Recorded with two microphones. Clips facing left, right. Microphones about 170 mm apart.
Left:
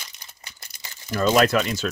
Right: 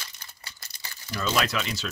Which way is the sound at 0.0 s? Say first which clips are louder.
Even; 20° left (ahead or behind).